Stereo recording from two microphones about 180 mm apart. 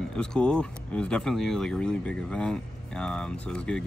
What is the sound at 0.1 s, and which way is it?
Speech, 5° left (ahead or behind).